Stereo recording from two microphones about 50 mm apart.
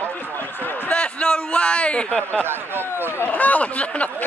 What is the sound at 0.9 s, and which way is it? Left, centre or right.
A man's voice, left.